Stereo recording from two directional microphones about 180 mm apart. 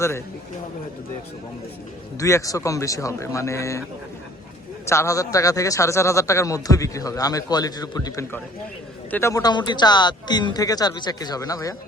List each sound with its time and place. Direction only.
2.1 s speech: 15° left (ahead or behind)
4.9 s a man's voice: 15° left (ahead or behind)